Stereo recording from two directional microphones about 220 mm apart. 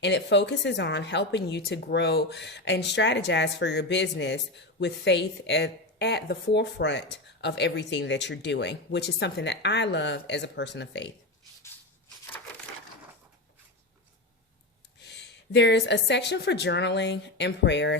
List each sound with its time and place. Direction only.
0.0 s a woman's voice: 55° left (ahead or behind)
11.6 s a sound: 10° left (ahead or behind)
15.0 s a woman's voice: 50° left (ahead or behind)